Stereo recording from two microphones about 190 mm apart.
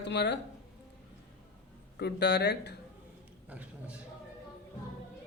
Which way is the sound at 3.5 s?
10° right (ahead or behind).